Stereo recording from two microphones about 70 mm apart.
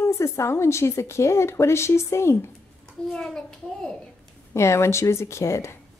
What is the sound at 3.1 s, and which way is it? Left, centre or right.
Speech, centre.